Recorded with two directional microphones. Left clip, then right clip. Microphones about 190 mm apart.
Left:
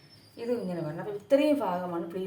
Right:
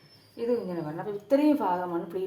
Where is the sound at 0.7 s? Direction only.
20° right (ahead or behind).